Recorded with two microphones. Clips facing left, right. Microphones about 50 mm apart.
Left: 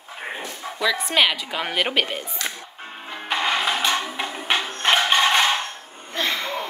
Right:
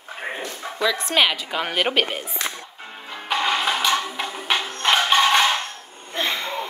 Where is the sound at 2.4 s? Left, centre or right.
Right.